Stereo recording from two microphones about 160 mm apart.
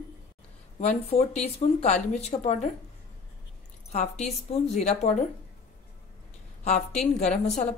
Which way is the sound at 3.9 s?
45° left (ahead or behind).